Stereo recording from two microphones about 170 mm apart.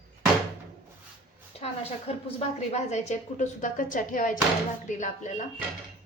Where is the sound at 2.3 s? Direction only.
40° left (ahead or behind).